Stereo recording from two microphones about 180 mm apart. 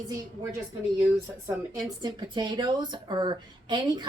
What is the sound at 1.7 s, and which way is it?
A woman's voice, 25° right (ahead or behind).